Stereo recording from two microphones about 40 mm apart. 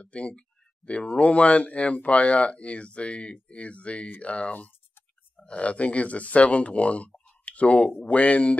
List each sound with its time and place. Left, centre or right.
0.0 s speech: left